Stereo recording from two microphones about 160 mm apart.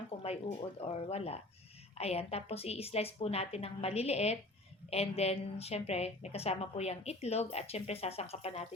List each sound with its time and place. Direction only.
0.2 s a woman's voice: 40° left (ahead or behind)